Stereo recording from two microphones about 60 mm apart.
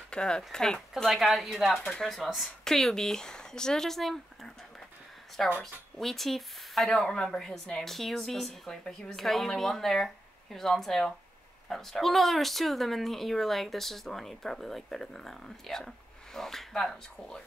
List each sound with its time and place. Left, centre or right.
0.1 s speech: centre
1.2 s speech: centre
1.9 s speech: centre
5.6 s speech: centre